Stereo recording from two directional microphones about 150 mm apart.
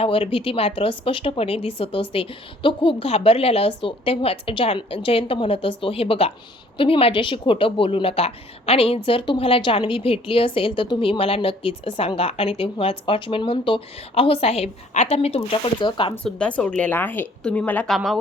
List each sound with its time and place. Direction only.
0.0 s a woman's voice: 40° left (ahead or behind)
16.2 s a woman's voice: 5° left (ahead or behind)